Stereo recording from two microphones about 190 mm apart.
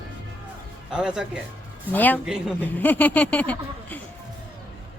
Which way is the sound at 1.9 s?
10° left (ahead or behind).